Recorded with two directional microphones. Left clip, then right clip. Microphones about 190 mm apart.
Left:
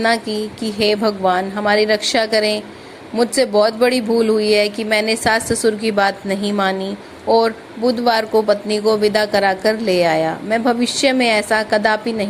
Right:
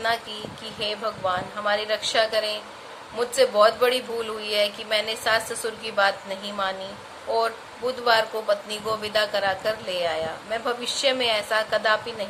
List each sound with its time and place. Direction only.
0.0 s speech: 30° left (ahead or behind)